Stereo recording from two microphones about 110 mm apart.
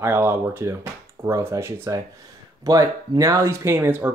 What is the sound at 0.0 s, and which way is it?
Speech, 20° right (ahead or behind).